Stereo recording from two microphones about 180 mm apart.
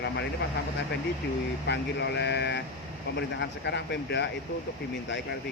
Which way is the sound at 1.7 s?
70° left (ahead or behind).